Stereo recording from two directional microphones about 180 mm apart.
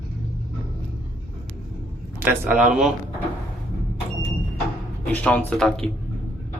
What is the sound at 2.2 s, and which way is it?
Speech, 10° right (ahead or behind).